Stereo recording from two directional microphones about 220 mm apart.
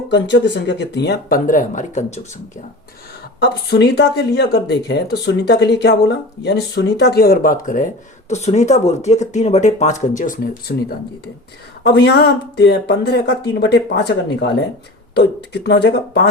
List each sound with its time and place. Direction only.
0.1 s speech: 55° left (ahead or behind); by 2.2 s 30° left (ahead or behind)
3.4 s speech: 50° left (ahead or behind)
15.6 s speech: 50° left (ahead or behind)